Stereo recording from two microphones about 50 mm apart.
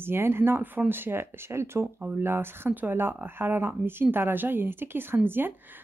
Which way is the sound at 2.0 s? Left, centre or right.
Right.